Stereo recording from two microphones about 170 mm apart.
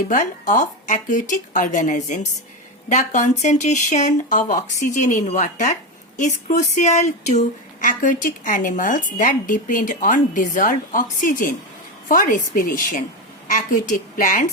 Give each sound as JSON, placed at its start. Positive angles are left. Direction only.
{"t": 0.1, "sound": "speech", "side_deg": 50}